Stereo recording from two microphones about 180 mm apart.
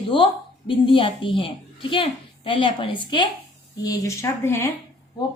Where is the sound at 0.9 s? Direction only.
30° left (ahead or behind).